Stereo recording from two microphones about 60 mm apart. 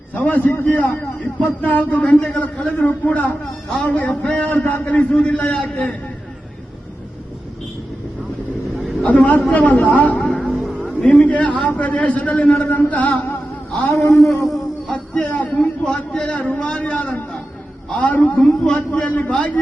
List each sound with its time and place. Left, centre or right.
0.1 s a man's voice: left
9.0 s a man's voice: left
10.2 s vehicle: centre
10.8 s a man's voice: centre
13.9 s a man's voice: left
14.8 s music: centre
15.5 s a man's voice: centre